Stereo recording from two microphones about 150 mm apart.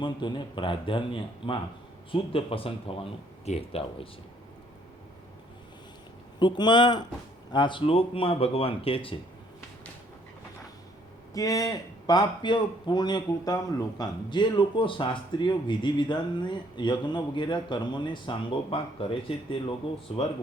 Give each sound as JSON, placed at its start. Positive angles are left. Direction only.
{"t": 0.0, "sound": "speech", "side_deg": 30}
{"t": 6.4, "sound": "a man's voice", "side_deg": 30}
{"t": 11.3, "sound": "a man's voice", "side_deg": 25}